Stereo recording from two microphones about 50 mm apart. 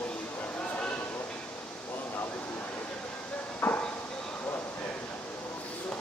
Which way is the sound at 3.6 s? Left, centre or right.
Left.